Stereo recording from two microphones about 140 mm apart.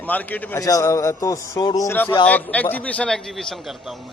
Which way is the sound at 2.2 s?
10° left (ahead or behind).